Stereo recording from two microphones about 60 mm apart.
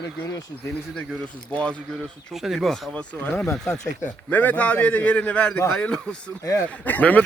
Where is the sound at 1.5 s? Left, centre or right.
Centre.